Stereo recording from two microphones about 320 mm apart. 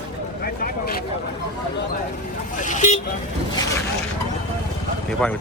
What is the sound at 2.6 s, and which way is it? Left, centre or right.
Vehicle, left.